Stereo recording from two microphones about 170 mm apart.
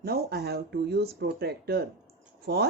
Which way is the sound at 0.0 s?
65° right (ahead or behind).